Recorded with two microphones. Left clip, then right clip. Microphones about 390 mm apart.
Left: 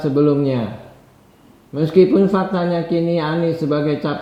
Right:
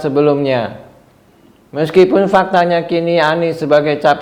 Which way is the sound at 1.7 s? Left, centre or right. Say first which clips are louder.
Right 3 dB; right.